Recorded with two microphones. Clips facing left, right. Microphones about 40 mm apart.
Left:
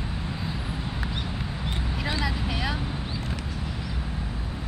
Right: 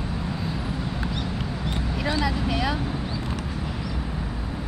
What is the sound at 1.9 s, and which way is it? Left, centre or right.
Vehicle, centre.